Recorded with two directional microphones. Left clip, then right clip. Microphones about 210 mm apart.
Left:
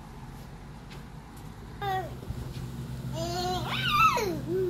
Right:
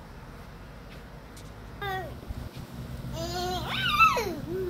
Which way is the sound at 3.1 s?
25° right (ahead or behind).